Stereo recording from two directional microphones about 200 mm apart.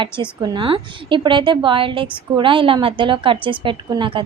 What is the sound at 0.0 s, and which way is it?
Speech, 25° right (ahead or behind).